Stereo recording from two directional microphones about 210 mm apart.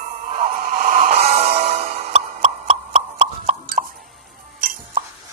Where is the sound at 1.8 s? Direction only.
45° right (ahead or behind).